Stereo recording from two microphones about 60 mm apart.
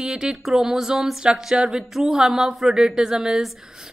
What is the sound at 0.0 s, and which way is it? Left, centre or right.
Speech, centre.